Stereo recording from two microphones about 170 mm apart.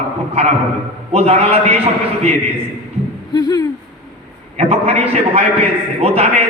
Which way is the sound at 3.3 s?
20° left (ahead or behind).